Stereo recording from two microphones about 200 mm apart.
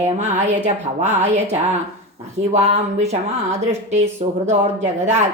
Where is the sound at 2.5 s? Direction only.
35° right (ahead or behind).